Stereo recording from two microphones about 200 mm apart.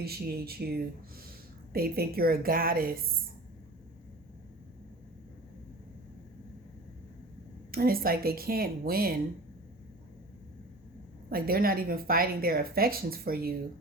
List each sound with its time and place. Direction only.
0.0 s speech: 50° right (ahead or behind)
7.7 s speech: 45° right (ahead or behind)
11.3 s speech: 50° right (ahead or behind)